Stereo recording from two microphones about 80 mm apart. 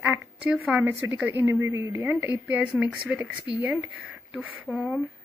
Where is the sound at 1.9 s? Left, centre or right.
Right.